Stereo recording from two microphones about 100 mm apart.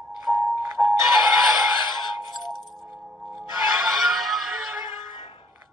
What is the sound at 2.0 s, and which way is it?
Music, 50° left (ahead or behind).